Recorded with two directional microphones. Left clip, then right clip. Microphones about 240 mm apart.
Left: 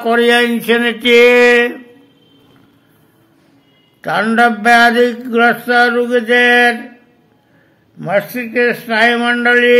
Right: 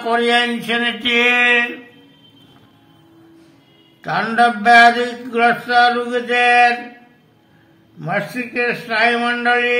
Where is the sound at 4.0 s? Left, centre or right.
Left.